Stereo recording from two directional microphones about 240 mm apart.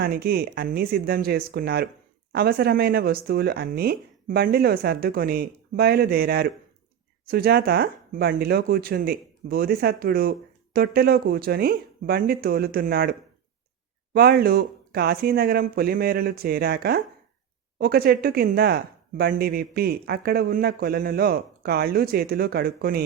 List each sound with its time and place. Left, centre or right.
0.0 s speech: right